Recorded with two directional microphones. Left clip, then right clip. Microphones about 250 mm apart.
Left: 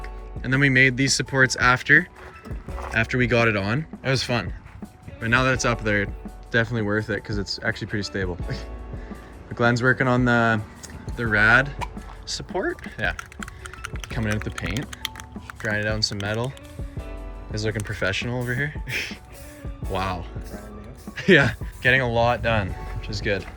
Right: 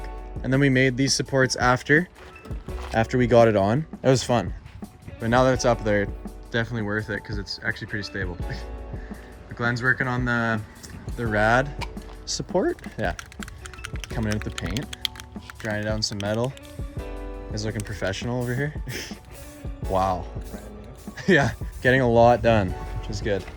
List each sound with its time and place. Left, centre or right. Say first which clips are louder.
0.0 s speech: right 1 dB; centre
12.3 s speech: right 2 dB; centre
13.1 s typing: left 3 dB; centre
15.4 s speech: left 3 dB; centre
17.5 s speech: left 5 dB; centre